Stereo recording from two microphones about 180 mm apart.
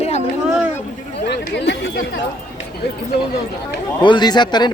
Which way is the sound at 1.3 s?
75° left (ahead or behind).